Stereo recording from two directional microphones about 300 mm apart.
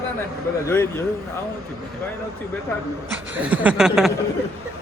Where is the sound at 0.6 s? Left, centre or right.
Centre.